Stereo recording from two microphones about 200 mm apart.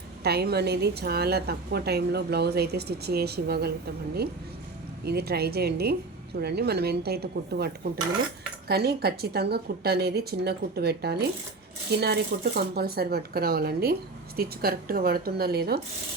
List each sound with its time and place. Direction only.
0.2 s a woman's voice: 50° right (ahead or behind)
5.0 s a woman's voice: 50° right (ahead or behind)